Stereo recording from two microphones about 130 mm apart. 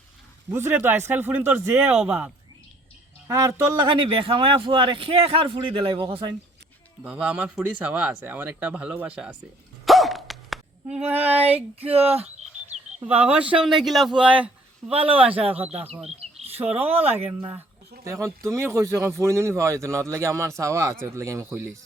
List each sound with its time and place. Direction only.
0.5 s speech: 20° right (ahead or behind)
3.2 s speech: 25° right (ahead or behind)
7.0 s speech: 10° right (ahead or behind)
9.8 s a sound: centre (ahead or behind)
11.9 s speech: 50° right (ahead or behind)
13.7 s speech: centre (ahead or behind)
14.8 s speech: 45° right (ahead or behind)
16.0 s bird: 55° right (ahead or behind)
18.0 s speech: 20° right (ahead or behind)